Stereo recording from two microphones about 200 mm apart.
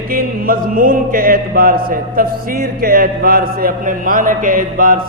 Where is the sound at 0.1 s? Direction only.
45° right (ahead or behind).